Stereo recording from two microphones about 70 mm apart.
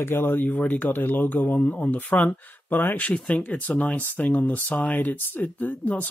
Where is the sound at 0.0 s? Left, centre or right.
Left.